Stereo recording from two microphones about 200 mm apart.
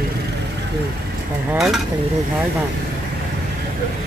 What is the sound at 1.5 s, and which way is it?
Speech, centre (ahead or behind).